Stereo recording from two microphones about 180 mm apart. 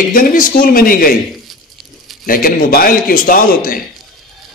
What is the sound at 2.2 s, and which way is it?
A man's voice, 50° left (ahead or behind).